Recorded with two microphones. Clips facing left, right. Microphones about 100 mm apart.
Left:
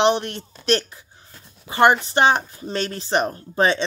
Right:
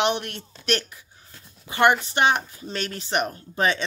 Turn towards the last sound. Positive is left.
turn(degrees=30)  # may be behind; listen again after turning